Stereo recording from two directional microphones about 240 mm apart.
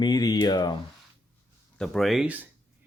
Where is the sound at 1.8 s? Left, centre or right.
Centre.